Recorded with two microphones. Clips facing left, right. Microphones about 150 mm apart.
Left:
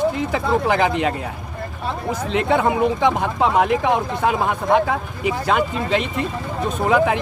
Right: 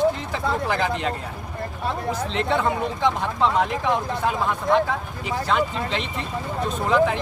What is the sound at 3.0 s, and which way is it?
Speech, 55° left (ahead or behind).